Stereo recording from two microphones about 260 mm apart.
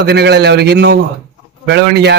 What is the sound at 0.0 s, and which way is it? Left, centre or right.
Speech, right.